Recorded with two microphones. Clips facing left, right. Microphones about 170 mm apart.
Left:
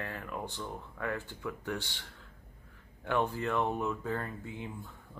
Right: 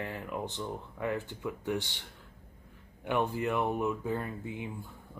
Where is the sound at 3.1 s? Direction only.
15° right (ahead or behind).